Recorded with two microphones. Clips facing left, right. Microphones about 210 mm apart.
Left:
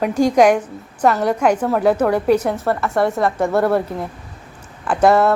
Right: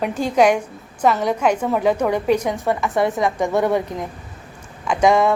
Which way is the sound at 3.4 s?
Centre (ahead or behind).